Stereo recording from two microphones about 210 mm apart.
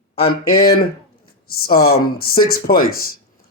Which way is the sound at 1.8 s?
45° left (ahead or behind).